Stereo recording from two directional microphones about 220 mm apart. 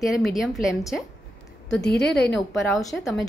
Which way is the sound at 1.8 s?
50° left (ahead or behind).